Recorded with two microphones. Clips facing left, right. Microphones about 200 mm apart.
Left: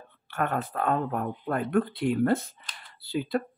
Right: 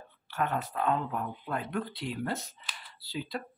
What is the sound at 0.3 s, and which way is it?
Speech, 55° left (ahead or behind).